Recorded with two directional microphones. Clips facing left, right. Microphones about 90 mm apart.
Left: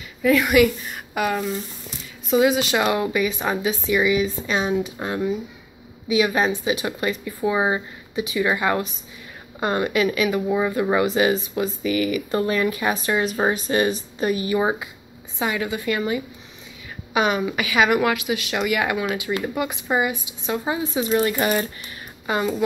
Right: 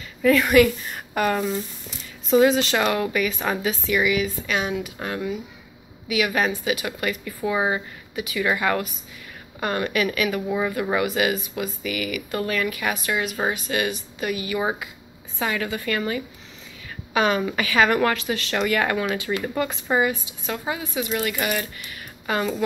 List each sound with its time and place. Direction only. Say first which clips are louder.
0.2 s a woman's voice: even; 10° left (ahead or behind); by 14.6 s 30° left (ahead or behind)
14.6 s speech: left 3 dB; 20° left (ahead or behind)
22.2 s speech: left 2 dB; 15° left (ahead or behind)